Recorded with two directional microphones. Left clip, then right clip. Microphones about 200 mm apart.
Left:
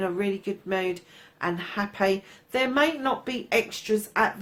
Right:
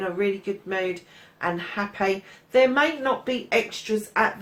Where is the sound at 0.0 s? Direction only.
45° left (ahead or behind).